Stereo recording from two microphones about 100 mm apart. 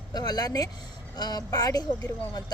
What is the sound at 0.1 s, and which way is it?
A woman's voice, 40° left (ahead or behind).